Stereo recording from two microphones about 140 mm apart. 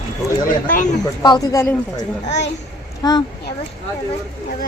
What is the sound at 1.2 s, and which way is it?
Speech, 30° left (ahead or behind).